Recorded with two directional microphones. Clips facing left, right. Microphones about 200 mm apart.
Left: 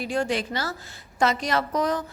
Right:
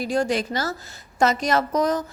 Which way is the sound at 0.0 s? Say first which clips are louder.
Right 3 dB; 40° right (ahead or behind).